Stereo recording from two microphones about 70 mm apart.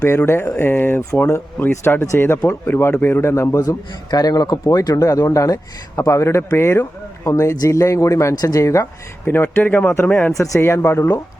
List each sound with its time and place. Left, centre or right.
0.3 s speech: left
3.6 s a man's voice: left
4.7 s speech: left
7.3 s speech: left
8.4 s a man's voice: left
8.6 s speech: left
9.2 s speech: left
10.3 s speech: left
10.6 s speech: left